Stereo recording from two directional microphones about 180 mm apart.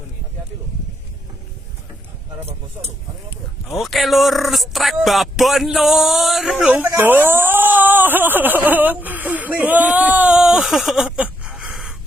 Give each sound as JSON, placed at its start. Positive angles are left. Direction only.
{"t": 3.8, "sound": "speech", "side_deg": 0}